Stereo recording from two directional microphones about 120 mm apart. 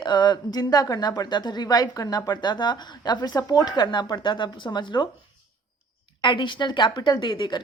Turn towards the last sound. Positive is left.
turn(degrees=40)  # may be behind; listen again after turning